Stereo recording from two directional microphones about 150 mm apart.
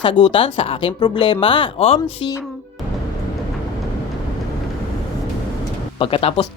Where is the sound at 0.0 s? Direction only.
35° left (ahead or behind).